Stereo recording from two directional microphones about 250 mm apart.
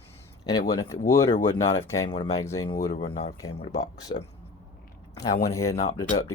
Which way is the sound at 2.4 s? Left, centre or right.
Centre.